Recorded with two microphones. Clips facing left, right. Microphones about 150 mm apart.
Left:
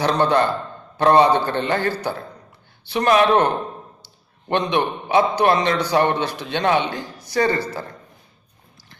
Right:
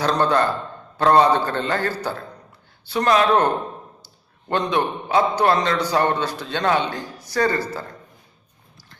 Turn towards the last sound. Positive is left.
turn(degrees=20)  # may be behind; listen again after turning